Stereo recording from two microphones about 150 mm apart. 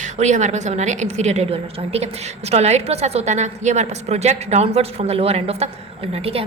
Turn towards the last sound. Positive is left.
turn(degrees=-45)  # may be behind; listen again after turning